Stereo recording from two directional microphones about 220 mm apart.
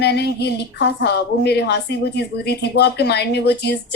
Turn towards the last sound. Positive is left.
turn(degrees=50)  # may be behind; listen again after turning